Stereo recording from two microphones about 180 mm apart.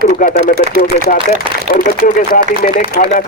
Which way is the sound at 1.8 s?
50° left (ahead or behind).